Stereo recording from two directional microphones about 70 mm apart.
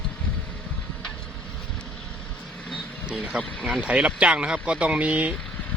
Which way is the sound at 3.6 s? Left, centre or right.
Centre.